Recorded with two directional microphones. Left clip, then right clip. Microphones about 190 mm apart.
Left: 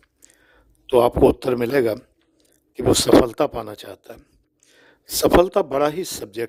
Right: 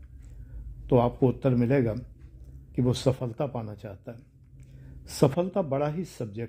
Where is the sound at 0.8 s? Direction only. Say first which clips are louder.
Left 9 dB; 45° left (ahead or behind).